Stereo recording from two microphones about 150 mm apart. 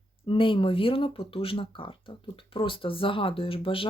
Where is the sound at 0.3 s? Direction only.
35° left (ahead or behind).